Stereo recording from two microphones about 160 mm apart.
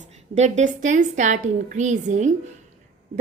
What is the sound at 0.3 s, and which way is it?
A woman's voice, 45° right (ahead or behind).